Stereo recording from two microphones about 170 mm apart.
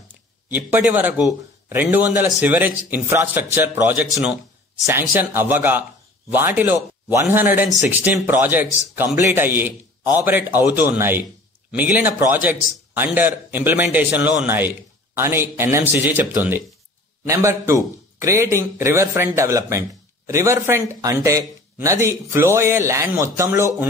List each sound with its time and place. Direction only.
0.5 s a man's voice: 10° right (ahead or behind)